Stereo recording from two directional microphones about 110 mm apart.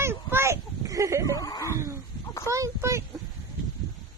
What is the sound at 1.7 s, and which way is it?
Fowl, 25° right (ahead or behind).